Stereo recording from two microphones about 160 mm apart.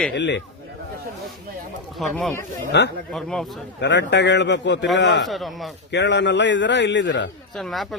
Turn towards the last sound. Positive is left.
turn(degrees=0)  # may be behind; listen again after turning